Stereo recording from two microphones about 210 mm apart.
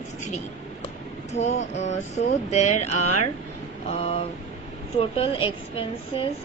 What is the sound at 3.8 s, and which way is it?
A woman's voice, 30° left (ahead or behind).